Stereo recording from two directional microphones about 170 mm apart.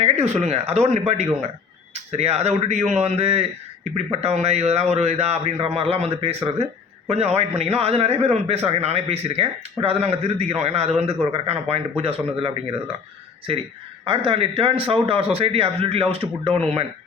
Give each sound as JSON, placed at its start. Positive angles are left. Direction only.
{"t": 0.0, "sound": "a man's voice", "side_deg": -40}
{"t": 13.5, "sound": "a man's voice", "side_deg": -35}